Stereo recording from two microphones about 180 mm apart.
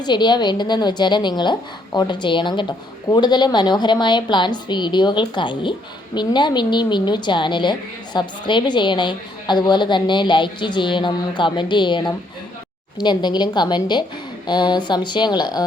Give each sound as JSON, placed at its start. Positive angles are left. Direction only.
{"t": 0.0, "sound": "a woman's voice", "side_deg": 25}